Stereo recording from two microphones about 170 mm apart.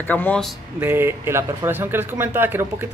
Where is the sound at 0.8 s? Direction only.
15° right (ahead or behind).